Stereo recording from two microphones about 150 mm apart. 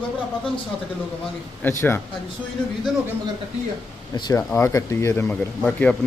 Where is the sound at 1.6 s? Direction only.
15° left (ahead or behind).